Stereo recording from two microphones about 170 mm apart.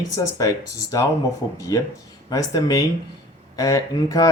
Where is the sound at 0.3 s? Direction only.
20° left (ahead or behind).